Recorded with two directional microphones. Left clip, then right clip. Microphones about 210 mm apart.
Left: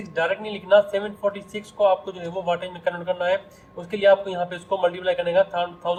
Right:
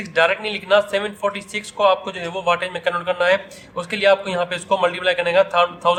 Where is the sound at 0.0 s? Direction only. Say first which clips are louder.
Right 7 dB; 50° right (ahead or behind).